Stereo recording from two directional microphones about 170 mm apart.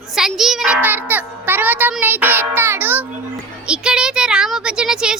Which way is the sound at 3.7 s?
5° right (ahead or behind).